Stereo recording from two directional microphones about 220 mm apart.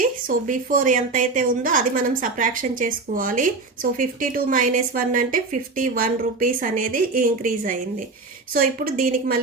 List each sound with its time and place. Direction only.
0.0 s a woman's voice: 40° right (ahead or behind)